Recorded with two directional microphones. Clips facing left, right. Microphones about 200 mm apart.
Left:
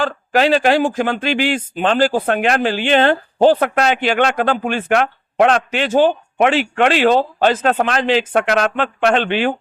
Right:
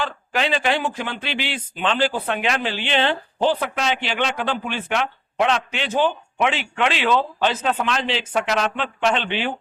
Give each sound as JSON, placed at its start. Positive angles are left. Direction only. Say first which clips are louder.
{"t": 0.0, "sound": "speech", "louder": "left 8 dB", "side_deg": 45}